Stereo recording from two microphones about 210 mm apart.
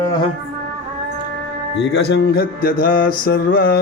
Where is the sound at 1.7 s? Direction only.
55° left (ahead or behind).